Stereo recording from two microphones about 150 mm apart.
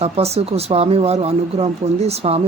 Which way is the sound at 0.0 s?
45° right (ahead or behind).